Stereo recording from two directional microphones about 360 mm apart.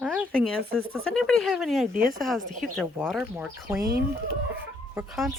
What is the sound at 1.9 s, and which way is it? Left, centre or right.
Speech, right.